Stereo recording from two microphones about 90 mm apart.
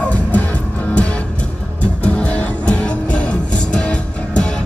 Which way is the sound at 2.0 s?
15° left (ahead or behind).